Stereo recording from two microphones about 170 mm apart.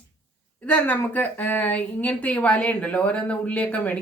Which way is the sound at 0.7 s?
10° left (ahead or behind).